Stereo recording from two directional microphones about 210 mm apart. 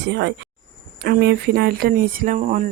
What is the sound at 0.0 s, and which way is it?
Speech, 55° right (ahead or behind).